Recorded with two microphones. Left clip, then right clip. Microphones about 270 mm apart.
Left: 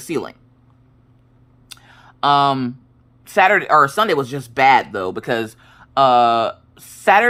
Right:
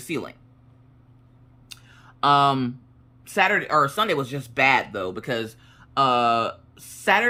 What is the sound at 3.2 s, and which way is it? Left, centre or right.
Speech, centre.